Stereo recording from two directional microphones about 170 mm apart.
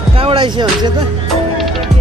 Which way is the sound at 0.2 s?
30° right (ahead or behind).